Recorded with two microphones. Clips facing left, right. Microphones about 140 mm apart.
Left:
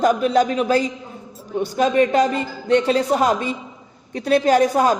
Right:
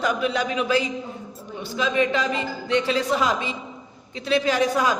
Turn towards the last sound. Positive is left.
turn(degrees=45)  # may be behind; listen again after turning